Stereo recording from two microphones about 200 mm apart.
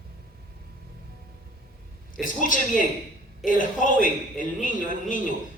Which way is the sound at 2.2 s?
40° left (ahead or behind).